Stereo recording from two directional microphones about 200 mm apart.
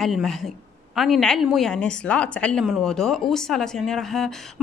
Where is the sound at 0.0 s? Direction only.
Centre (ahead or behind).